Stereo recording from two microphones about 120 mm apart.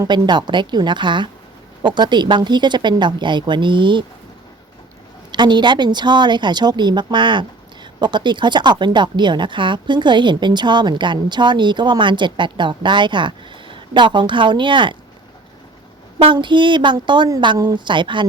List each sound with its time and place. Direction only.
0.1 s speech: 35° right (ahead or behind)
5.3 s speech: 40° right (ahead or behind)
16.1 s speech: 40° right (ahead or behind)